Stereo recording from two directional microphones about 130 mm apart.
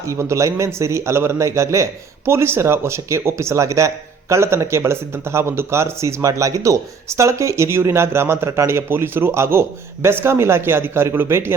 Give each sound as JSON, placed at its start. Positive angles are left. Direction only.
{"t": 0.1, "sound": "a man's voice", "side_deg": -20}